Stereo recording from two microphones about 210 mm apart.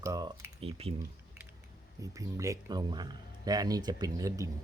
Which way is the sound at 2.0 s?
15° right (ahead or behind).